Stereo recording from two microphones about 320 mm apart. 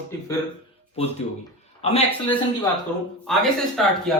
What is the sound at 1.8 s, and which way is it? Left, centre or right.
Speech, centre.